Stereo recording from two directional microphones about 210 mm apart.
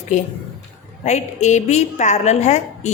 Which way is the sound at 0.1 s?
35° left (ahead or behind).